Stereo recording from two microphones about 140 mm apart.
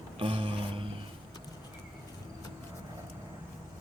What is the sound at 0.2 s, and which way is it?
Music, 40° right (ahead or behind).